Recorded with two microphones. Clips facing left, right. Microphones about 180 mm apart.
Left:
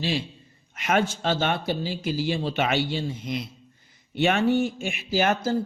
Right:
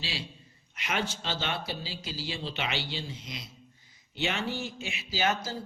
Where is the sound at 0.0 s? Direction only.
50° left (ahead or behind).